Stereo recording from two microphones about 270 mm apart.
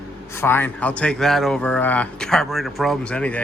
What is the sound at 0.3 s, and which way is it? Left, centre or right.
A man's voice, centre.